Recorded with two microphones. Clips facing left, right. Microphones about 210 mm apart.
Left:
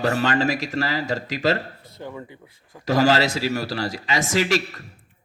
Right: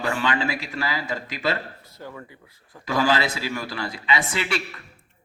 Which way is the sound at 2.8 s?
45° left (ahead or behind).